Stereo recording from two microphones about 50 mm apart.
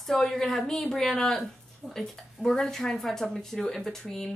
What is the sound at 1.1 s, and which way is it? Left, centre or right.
Speech, centre.